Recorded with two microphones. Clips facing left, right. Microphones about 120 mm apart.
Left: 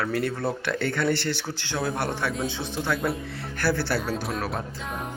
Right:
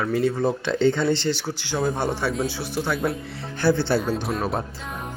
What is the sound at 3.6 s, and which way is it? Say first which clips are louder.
Speech: right 5 dB; 20° right (ahead or behind).